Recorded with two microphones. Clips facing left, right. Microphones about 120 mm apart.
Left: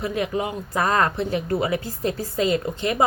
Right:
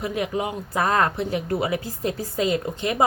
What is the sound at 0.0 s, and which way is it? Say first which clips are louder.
Speech: left 1 dB; 15° right (ahead or behind).